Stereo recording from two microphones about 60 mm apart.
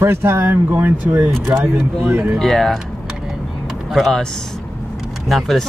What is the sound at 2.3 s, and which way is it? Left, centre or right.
Speech, centre.